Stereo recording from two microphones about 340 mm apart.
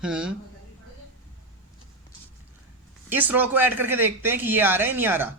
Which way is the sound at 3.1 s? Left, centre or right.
Centre.